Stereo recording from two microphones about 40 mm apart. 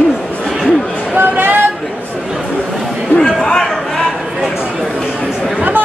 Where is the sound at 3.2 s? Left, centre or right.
Centre.